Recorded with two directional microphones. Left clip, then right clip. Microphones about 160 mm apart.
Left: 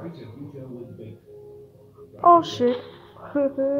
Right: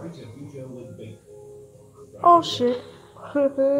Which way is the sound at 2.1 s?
Centre (ahead or behind).